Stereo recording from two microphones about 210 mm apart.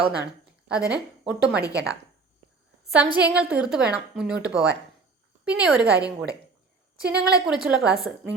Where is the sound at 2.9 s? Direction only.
5° right (ahead or behind).